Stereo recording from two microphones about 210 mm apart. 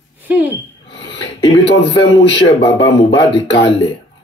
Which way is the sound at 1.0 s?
25° left (ahead or behind).